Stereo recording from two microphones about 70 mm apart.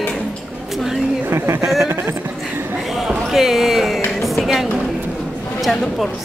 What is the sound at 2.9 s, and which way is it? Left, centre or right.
Speech, centre.